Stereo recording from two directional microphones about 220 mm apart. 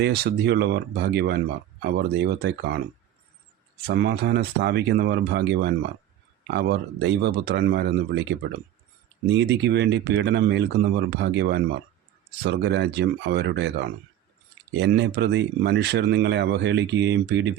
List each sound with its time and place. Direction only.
0.0 s speech: 50° right (ahead or behind)
3.8 s speech: 50° right (ahead or behind)
9.3 s speech: 50° right (ahead or behind)